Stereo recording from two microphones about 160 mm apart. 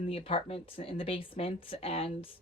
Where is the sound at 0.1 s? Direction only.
35° left (ahead or behind).